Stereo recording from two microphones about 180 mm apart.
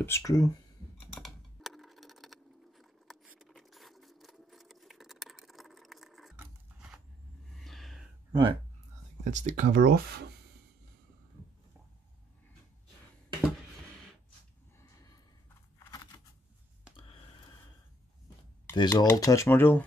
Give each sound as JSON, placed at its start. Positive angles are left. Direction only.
{"t": 0.0, "sound": "speech", "side_deg": 15}
{"t": 1.1, "sound": "a sound", "side_deg": 0}
{"t": 8.3, "sound": "speech", "side_deg": -25}
{"t": 9.2, "sound": "speech", "side_deg": -45}
{"t": 15.8, "sound": "a sound", "side_deg": 20}
{"t": 18.8, "sound": "speech", "side_deg": 20}